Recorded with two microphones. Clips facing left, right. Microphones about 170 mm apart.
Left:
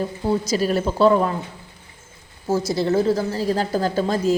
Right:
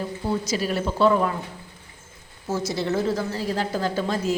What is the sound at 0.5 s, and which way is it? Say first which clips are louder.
Speech: left 4 dB; 40° left (ahead or behind).